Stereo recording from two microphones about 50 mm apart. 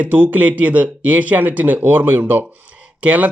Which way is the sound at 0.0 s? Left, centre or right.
Right.